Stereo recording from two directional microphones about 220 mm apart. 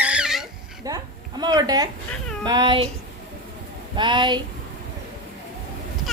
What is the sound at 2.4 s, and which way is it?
Speech, 20° right (ahead or behind).